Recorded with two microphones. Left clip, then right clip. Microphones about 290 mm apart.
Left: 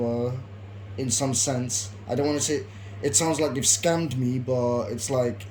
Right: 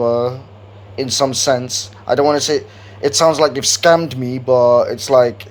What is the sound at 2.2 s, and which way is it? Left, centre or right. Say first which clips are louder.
Speech: right 11 dB; centre.